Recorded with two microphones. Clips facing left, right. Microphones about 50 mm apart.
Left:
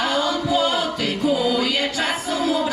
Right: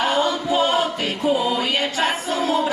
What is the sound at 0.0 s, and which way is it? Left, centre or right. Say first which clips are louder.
Choir: right 1 dB; right.